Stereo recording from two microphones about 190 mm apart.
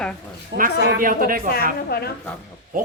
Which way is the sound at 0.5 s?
70° right (ahead or behind).